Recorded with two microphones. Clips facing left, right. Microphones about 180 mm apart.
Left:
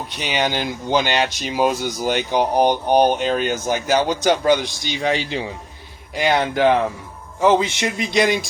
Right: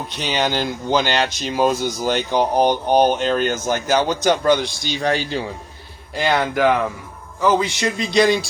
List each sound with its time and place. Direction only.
0.2 s a man's voice: 10° left (ahead or behind)